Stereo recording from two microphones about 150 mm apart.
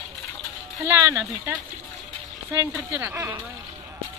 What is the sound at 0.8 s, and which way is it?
Speech, 15° right (ahead or behind).